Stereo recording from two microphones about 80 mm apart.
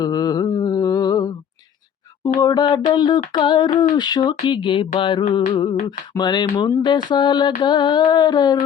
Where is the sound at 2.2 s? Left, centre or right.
Left.